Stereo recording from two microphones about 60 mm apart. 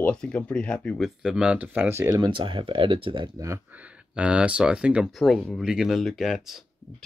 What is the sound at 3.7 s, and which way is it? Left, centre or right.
Speech, right.